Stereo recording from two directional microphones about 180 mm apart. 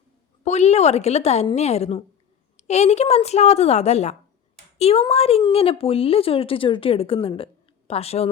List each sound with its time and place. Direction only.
0.4 s speech: 40° left (ahead or behind)